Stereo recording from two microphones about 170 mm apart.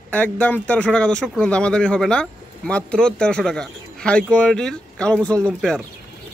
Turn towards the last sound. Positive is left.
turn(degrees=5)  # may be behind; listen again after turning